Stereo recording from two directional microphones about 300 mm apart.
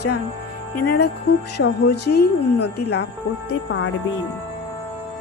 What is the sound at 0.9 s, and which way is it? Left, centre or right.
Speech, left.